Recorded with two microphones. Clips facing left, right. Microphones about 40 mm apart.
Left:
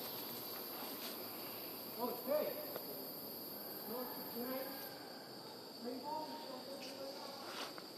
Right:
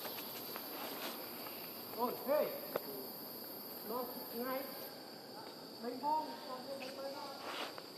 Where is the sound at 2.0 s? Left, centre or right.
Right.